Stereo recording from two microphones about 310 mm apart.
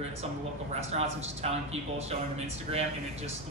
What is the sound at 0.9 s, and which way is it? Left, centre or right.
A man's voice, centre.